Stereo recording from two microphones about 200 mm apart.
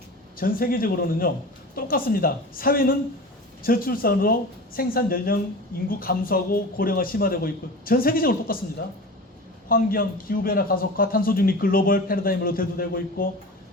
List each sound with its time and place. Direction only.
0.3 s a man's voice: 45° left (ahead or behind)
9.6 s a man's voice: 45° left (ahead or behind)